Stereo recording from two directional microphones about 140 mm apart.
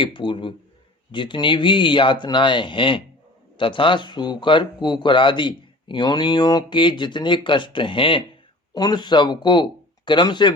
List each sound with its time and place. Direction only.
0.0 s speech: 35° left (ahead or behind)